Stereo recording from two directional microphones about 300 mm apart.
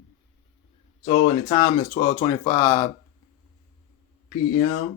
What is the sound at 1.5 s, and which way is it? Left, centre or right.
Speech, centre.